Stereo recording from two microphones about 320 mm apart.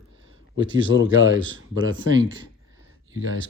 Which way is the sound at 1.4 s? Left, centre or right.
Right.